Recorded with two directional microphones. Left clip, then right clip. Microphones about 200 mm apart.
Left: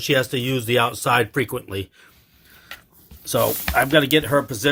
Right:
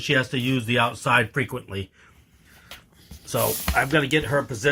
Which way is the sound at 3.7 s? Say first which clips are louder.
Left 5 dB; 55° left (ahead or behind).